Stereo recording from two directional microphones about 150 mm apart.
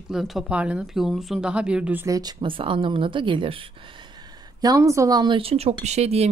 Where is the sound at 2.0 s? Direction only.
25° right (ahead or behind).